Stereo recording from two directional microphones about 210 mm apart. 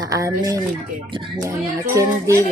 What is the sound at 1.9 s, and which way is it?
Speech, 15° right (ahead or behind).